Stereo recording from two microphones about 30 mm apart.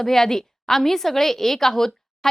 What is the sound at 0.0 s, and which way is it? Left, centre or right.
A woman's voice, centre.